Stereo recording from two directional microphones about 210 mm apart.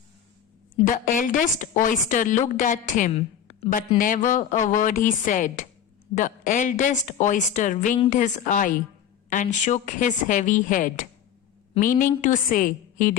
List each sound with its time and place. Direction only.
0.9 s a woman's voice: 40° left (ahead or behind)